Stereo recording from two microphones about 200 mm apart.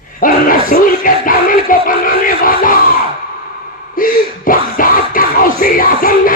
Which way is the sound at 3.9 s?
45° left (ahead or behind).